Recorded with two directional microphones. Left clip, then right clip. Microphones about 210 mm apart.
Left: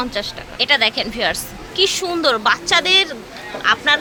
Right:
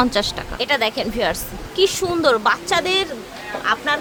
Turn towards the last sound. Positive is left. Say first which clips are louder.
# left 4 dB
turn(degrees=0)  # may be behind; listen again after turning